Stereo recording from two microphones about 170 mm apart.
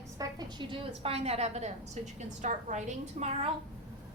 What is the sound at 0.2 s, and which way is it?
A woman's voice, 25° right (ahead or behind).